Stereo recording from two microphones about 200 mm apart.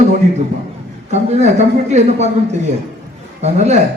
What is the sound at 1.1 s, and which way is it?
A woman's voice, 35° right (ahead or behind).